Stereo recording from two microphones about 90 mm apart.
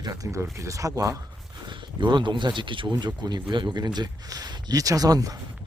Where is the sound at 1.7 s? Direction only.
60° right (ahead or behind).